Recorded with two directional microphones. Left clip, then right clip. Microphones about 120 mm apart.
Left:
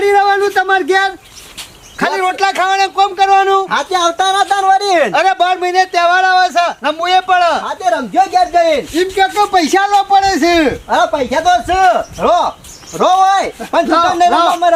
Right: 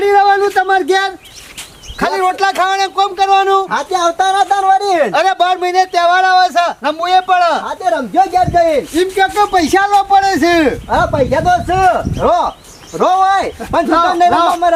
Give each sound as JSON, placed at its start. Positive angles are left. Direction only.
{"t": 0.0, "sound": "a sound", "side_deg": 0}
{"t": 2.0, "sound": "speech", "side_deg": -5}
{"t": 3.7, "sound": "speech", "side_deg": 15}
{"t": 5.1, "sound": "speech", "side_deg": -10}
{"t": 7.9, "sound": "speech", "side_deg": 15}
{"t": 9.0, "sound": "a man's voice", "side_deg": -10}
{"t": 10.8, "sound": "speech", "side_deg": 10}